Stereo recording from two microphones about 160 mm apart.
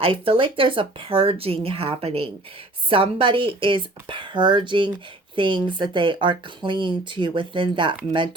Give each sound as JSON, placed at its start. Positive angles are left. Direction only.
{"t": 0.0, "sound": "speech", "side_deg": -35}